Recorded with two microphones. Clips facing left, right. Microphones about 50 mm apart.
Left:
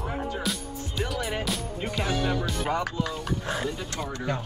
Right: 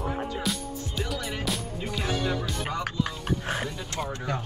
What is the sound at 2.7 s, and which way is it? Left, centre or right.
Music, left.